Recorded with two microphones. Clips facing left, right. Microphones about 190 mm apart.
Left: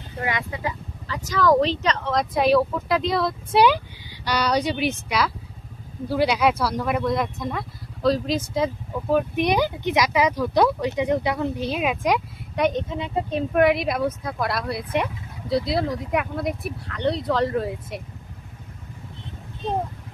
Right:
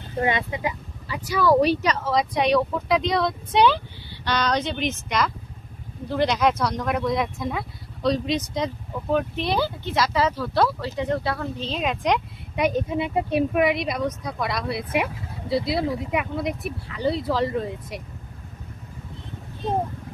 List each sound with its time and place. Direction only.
0.2 s speech: 25° right (ahead or behind)
13.6 s speech: centre (ahead or behind)